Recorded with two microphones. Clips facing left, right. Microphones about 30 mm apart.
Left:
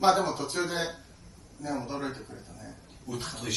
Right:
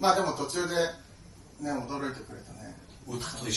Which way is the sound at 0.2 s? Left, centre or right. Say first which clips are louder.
Even; centre.